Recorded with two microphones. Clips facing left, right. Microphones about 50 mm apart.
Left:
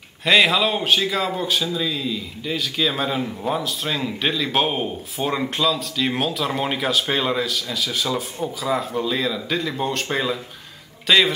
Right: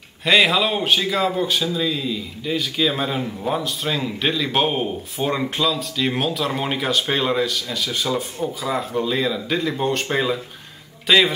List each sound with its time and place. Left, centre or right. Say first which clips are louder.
0.2 s speech: even; centre